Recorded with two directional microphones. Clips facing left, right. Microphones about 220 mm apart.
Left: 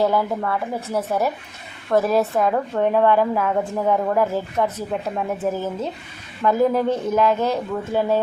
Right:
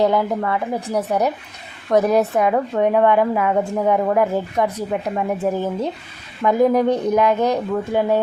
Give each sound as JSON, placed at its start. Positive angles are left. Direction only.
{"t": 0.0, "sound": "a woman's voice", "side_deg": -20}